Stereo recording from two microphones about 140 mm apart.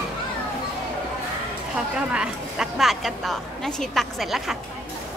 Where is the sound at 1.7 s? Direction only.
5° right (ahead or behind).